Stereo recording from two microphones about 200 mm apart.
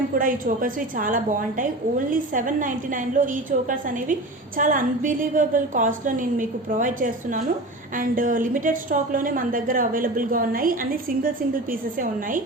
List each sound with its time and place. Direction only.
0.1 s a woman's voice: 45° right (ahead or behind)